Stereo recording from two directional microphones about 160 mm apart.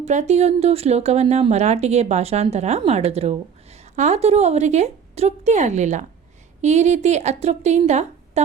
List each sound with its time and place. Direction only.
0.0 s speech: 45° right (ahead or behind)